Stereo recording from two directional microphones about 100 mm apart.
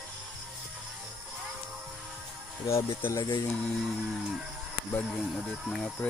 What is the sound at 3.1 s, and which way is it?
Speech, 45° left (ahead or behind).